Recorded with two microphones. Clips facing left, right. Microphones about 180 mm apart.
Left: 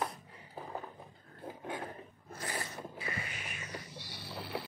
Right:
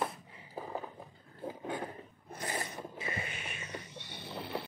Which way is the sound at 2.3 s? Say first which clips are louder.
Right 2 dB; 20° right (ahead or behind).